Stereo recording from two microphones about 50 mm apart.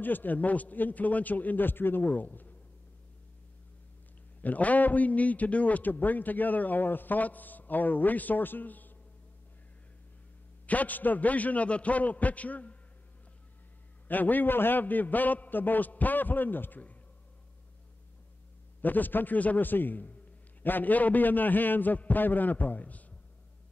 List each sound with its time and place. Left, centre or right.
0.0 s a man's voice: left
2.0 s a man's voice: left
4.4 s a man's voice: left
10.7 s a man's voice: left
14.0 s a man's voice: left
18.8 s a man's voice: left